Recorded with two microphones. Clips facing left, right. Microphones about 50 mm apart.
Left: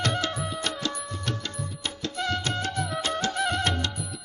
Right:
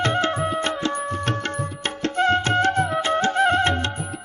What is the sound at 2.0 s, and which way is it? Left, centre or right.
Music, right.